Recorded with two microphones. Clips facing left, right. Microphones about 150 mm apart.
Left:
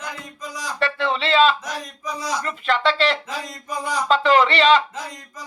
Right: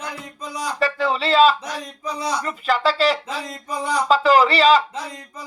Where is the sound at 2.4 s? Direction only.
5° right (ahead or behind).